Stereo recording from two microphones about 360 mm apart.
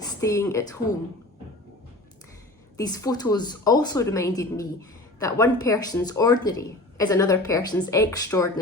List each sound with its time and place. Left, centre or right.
0.2 s speech: centre
2.7 s speech: centre